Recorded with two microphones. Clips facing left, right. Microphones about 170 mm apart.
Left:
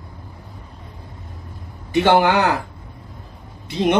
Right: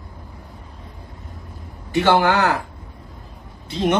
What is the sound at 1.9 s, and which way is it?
Speech, 20° left (ahead or behind).